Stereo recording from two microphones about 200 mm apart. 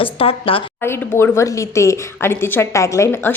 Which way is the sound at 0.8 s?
10° left (ahead or behind).